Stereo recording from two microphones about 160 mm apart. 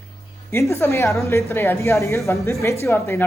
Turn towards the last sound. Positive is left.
turn(degrees=15)  # may be behind; listen again after turning